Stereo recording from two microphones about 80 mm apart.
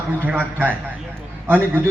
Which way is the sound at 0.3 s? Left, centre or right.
Centre.